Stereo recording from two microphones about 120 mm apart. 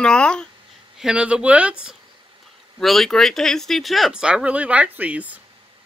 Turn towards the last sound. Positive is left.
turn(degrees=-10)  # may be behind; listen again after turning